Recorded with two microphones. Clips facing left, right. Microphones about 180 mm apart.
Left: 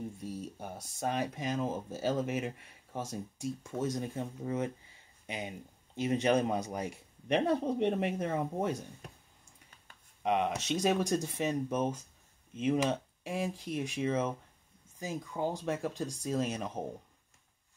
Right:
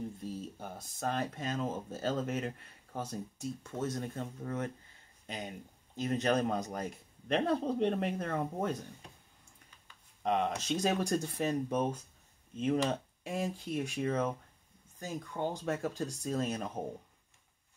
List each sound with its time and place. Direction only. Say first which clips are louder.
0.6 s speech: left 2 dB; 10° left (ahead or behind)
10.2 s speech: left 1 dB; 5° left (ahead or behind)